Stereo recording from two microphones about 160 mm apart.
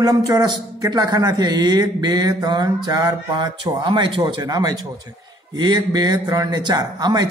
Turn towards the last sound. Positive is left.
turn(degrees=-25)  # may be behind; listen again after turning